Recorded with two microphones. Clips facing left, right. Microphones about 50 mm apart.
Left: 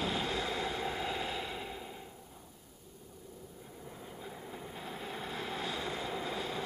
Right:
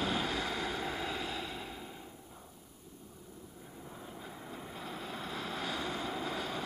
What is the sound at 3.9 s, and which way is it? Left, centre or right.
Vehicle, centre.